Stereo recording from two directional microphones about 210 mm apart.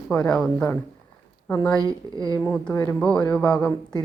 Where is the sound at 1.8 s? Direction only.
15° right (ahead or behind).